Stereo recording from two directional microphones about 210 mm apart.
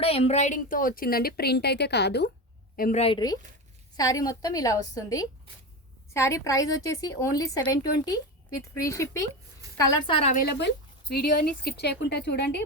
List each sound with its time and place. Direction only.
0.0 s a woman's voice: 30° left (ahead or behind)
3.0 s a woman's voice: 20° left (ahead or behind)
9.7 s a woman's voice: 25° left (ahead or behind)
10.3 s speech: 50° left (ahead or behind)